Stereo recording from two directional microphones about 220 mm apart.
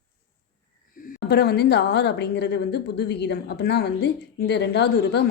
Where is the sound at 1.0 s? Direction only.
45° left (ahead or behind).